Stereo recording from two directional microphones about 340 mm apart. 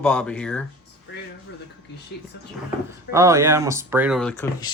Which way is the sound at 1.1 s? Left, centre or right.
Left.